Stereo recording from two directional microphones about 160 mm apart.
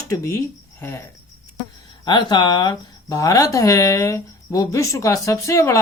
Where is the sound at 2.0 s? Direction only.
30° left (ahead or behind).